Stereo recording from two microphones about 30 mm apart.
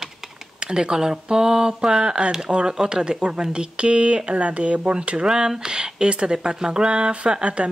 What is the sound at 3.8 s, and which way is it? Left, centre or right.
Speech, right.